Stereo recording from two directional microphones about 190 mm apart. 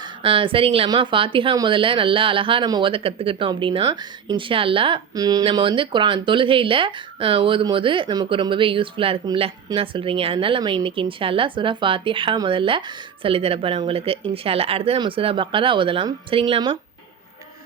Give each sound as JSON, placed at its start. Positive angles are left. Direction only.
{"t": 0.2, "sound": "a woman's voice", "side_deg": -30}